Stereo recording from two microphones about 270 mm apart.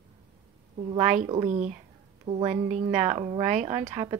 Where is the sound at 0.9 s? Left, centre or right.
Right.